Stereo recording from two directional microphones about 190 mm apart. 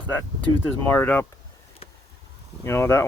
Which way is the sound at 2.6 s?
15° left (ahead or behind).